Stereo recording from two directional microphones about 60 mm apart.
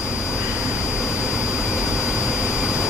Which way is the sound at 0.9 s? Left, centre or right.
Centre.